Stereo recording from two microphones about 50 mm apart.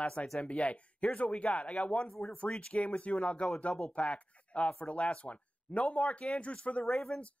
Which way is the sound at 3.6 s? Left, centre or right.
Left.